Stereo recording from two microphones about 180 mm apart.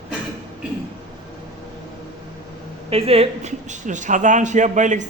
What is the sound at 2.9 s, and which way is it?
Speech, 30° right (ahead or behind).